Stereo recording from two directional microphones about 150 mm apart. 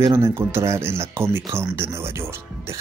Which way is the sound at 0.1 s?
15° right (ahead or behind).